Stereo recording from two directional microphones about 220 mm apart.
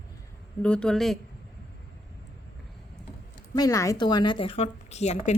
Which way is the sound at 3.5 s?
15° left (ahead or behind).